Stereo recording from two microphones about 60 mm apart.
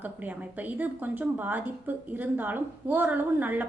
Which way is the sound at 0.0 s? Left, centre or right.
Right.